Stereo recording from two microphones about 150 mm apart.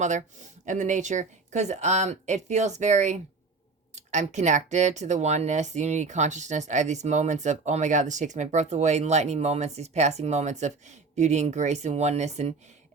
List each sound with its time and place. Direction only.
0.0 s speech: 55° right (ahead or behind)